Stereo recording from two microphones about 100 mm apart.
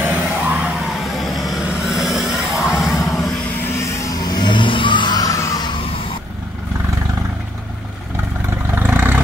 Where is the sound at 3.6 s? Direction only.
25° left (ahead or behind).